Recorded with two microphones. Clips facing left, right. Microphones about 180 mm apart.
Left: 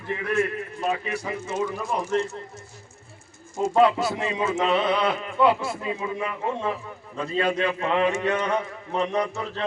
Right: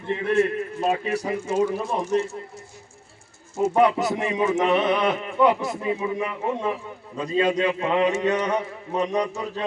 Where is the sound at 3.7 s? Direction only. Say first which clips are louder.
Left 1 dB; 20° right (ahead or behind).